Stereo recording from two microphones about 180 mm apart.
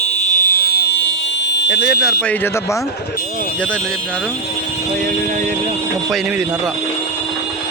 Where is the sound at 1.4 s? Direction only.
80° left.